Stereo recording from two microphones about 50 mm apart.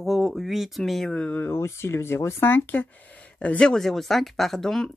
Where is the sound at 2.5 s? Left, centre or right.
Left.